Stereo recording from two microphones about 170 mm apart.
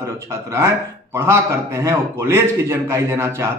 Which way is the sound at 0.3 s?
15° right (ahead or behind).